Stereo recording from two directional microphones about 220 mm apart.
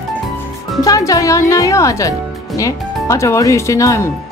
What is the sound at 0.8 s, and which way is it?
Speech, 15° left (ahead or behind).